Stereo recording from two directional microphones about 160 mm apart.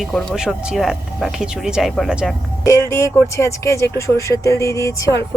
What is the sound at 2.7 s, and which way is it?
Speech, 15° left (ahead or behind).